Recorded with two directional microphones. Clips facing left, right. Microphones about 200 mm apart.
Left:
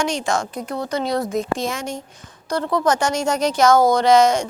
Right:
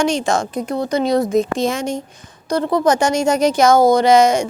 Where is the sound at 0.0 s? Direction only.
25° right (ahead or behind).